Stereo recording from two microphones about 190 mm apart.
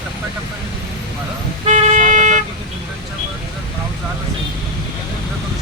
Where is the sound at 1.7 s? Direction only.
40° right (ahead or behind).